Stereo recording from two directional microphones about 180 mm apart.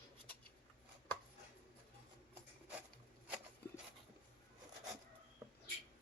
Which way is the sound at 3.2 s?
5° right (ahead or behind).